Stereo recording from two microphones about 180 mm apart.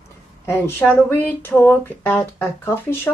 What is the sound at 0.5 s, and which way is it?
Speech, 10° left (ahead or behind).